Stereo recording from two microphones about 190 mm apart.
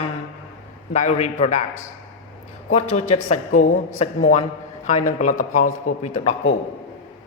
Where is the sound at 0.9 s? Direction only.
35° left (ahead or behind).